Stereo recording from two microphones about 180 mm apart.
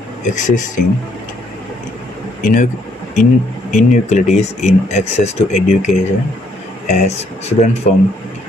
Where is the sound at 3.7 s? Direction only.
40° left (ahead or behind).